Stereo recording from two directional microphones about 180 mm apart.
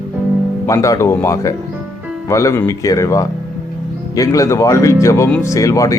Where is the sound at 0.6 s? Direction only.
20° left (ahead or behind).